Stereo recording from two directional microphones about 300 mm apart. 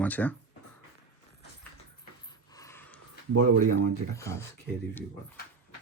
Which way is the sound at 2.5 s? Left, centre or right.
Centre.